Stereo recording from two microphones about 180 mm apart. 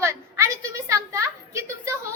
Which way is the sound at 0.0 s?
15° right (ahead or behind).